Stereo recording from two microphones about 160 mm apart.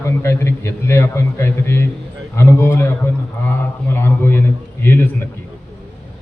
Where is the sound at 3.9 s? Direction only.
15° left (ahead or behind).